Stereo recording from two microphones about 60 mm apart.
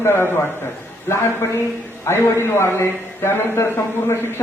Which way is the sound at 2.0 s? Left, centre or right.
Left.